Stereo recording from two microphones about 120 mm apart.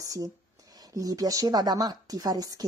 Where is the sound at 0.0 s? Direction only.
30° right (ahead or behind).